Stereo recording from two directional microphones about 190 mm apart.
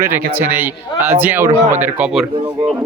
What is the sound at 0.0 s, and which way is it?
A man's voice, 10° right (ahead or behind).